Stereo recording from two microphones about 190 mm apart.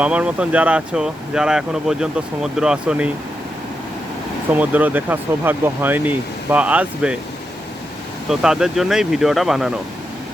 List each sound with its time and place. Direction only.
0.0 s speech: 5° right (ahead or behind)
4.5 s speech: 10° right (ahead or behind)
8.3 s speech: 5° right (ahead or behind)